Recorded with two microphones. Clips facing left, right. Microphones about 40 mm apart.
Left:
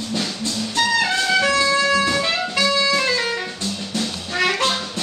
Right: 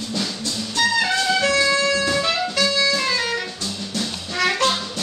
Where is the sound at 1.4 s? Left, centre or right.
Centre.